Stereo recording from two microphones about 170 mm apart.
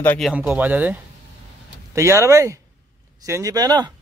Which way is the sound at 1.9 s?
15° right (ahead or behind).